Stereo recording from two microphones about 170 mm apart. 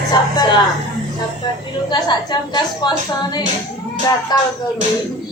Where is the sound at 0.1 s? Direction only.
25° left (ahead or behind).